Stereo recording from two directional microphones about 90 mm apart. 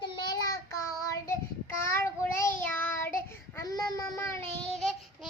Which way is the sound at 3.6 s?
45° left (ahead or behind).